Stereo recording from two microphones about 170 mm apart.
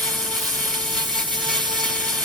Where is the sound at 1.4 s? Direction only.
Centre (ahead or behind).